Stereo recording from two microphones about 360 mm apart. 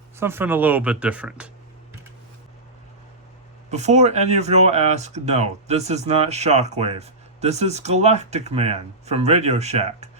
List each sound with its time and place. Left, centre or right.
0.2 s speech: centre
3.7 s speech: centre